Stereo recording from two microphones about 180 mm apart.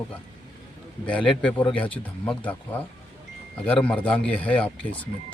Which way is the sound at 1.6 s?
30° left (ahead or behind).